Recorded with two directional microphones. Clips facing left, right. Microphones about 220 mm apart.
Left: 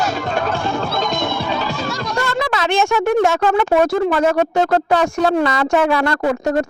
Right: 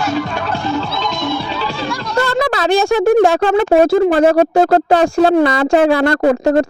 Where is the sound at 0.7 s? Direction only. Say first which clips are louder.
Right 1 dB; 50° left (ahead or behind).